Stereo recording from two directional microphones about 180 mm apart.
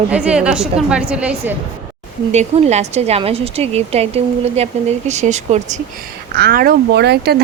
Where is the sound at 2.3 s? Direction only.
40° right (ahead or behind).